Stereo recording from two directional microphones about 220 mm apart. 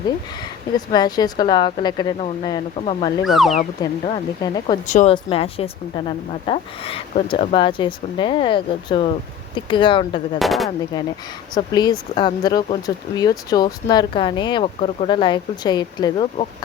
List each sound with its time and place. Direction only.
0.9 s speech: 20° left (ahead or behind)
3.2 s speech: centre (ahead or behind)
3.5 s speech: 30° left (ahead or behind)
4.9 s speech: 35° left (ahead or behind)
10.3 s speech: centre (ahead or behind)
10.9 s speech: 20° left (ahead or behind)